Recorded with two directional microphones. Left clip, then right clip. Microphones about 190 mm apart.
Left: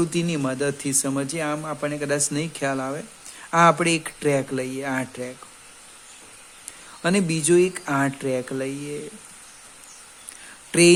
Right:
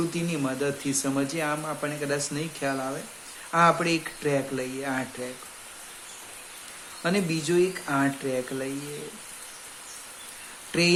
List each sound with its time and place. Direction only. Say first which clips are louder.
0.1 s speech: left 4 dB; 50° left (ahead or behind)
7.0 s speech: left 4 dB; 50° left (ahead or behind)
10.7 s speech: left 8 dB; 50° left (ahead or behind)